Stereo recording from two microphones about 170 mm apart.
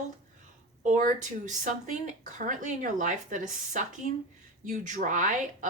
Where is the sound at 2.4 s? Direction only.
50° right (ahead or behind).